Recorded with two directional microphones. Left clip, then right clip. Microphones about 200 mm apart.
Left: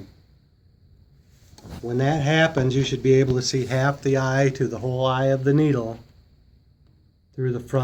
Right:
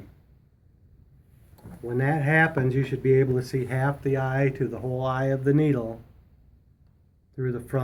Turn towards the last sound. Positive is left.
turn(degrees=35)  # may be behind; listen again after turning